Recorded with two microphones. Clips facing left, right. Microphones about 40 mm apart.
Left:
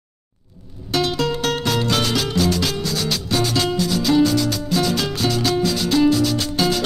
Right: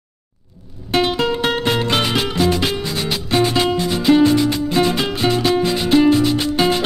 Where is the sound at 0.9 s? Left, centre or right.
Right.